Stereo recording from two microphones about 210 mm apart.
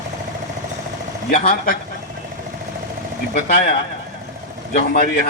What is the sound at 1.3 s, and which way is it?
Speech, 45° left (ahead or behind).